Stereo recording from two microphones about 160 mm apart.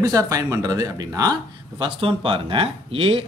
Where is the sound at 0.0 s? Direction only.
20° right (ahead or behind).